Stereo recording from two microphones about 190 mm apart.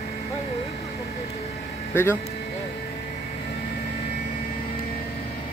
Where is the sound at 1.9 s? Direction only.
10° left (ahead or behind).